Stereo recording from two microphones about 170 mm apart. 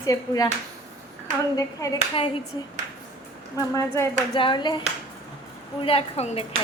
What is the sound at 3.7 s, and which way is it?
Speech, 15° left (ahead or behind).